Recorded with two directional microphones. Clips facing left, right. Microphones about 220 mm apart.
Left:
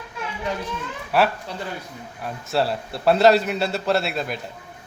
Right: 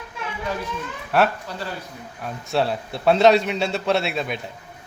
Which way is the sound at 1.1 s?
Centre (ahead or behind).